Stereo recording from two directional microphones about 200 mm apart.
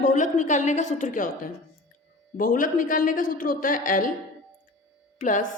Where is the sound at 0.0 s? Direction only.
40° left (ahead or behind).